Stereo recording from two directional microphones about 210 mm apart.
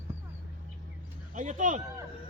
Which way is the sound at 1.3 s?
35° right (ahead or behind).